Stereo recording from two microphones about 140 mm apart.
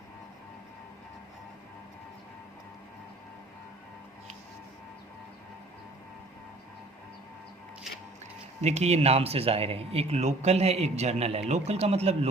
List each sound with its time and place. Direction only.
8.6 s speech: 50° right (ahead or behind)